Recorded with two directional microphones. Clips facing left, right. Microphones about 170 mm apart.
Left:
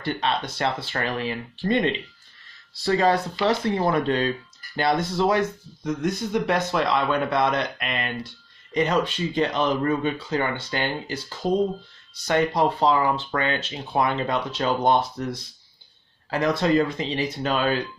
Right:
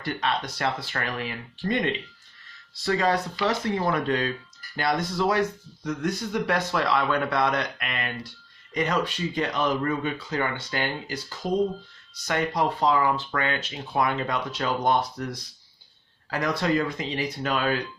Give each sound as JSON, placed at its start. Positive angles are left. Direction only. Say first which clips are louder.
{"t": 0.0, "sound": "speech", "louder": "left 2 dB", "side_deg": 25}